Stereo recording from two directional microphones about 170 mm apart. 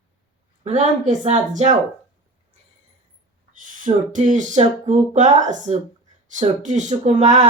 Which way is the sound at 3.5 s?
50° right (ahead or behind).